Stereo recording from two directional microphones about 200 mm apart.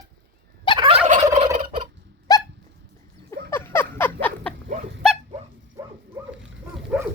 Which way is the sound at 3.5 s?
10° left (ahead or behind).